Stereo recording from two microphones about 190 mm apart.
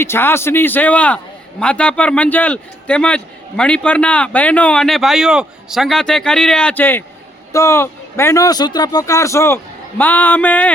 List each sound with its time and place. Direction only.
0.0 s a man's voice: 10° left (ahead or behind)